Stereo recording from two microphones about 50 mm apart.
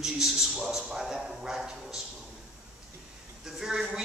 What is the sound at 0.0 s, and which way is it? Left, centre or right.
A man's voice, centre.